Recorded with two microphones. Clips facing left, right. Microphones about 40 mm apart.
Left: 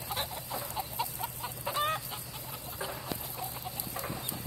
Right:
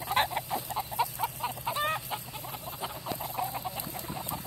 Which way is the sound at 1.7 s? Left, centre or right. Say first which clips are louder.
Left 1 dB; centre.